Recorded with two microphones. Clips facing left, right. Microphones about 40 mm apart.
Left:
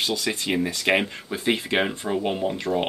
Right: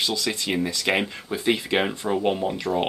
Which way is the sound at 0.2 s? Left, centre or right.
Centre.